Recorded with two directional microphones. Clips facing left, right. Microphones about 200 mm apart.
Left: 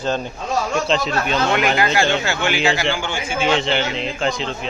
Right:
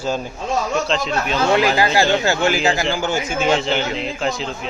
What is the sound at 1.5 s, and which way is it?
A man's voice, 30° right (ahead or behind).